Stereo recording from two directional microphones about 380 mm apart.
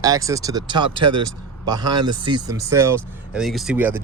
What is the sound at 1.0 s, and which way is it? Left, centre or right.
Speech, right.